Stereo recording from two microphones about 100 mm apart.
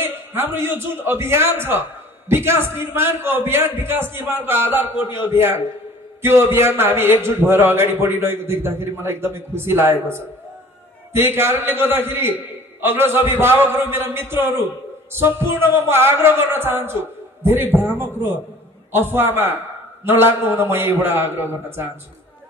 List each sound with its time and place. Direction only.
0.0 s a man's voice: 20° right (ahead or behind)